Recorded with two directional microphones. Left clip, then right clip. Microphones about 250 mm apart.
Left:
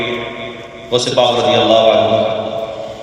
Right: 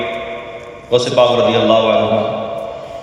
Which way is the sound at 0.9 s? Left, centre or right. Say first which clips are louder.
Right 1 dB; centre.